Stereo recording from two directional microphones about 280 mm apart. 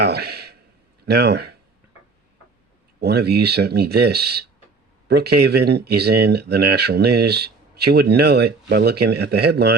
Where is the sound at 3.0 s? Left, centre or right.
Right.